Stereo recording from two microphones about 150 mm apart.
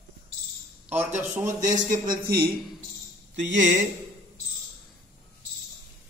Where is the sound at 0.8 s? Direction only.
10° right (ahead or behind).